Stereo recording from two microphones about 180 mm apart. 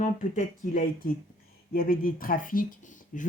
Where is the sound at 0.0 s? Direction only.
45° left (ahead or behind).